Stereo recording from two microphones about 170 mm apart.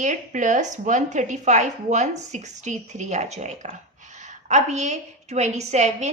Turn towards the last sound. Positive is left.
turn(degrees=-40)  # may be behind; listen again after turning